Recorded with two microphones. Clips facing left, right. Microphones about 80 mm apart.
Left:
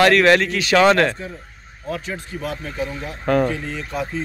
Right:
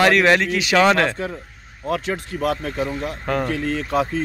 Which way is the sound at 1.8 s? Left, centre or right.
Right.